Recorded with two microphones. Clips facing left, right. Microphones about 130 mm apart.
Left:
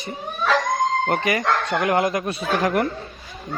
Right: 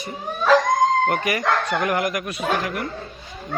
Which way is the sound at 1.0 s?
25° left (ahead or behind).